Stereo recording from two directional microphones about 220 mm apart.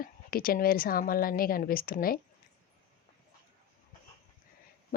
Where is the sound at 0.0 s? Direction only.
40° left (ahead or behind).